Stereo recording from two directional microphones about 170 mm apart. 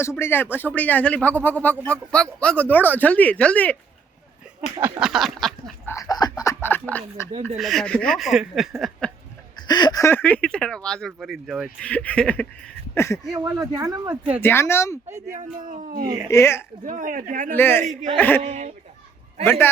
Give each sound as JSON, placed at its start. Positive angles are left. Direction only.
{"t": 0.2, "sound": "speech", "side_deg": 10}
{"t": 4.8, "sound": "speech", "side_deg": -5}
{"t": 5.8, "sound": "speech", "side_deg": 15}
{"t": 9.6, "sound": "speech", "side_deg": 25}
{"t": 13.3, "sound": "speech", "side_deg": -20}
{"t": 14.4, "sound": "speech", "side_deg": 15}
{"t": 15.7, "sound": "speech", "side_deg": -55}
{"t": 16.3, "sound": "speech", "side_deg": 15}
{"t": 16.8, "sound": "speech", "side_deg": -50}
{"t": 17.5, "sound": "speech", "side_deg": 10}
{"t": 17.8, "sound": "speech", "side_deg": -40}
{"t": 18.2, "sound": "speech", "side_deg": 10}
{"t": 18.4, "sound": "speech", "side_deg": -40}